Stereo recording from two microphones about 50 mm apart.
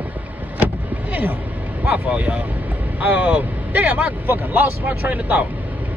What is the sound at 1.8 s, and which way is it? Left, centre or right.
A man's voice, right.